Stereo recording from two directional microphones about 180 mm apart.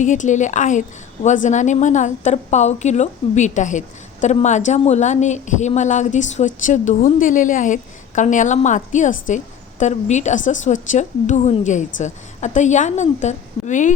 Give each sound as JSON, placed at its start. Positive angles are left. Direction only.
{"t": 0.0, "sound": "a woman's voice", "side_deg": 45}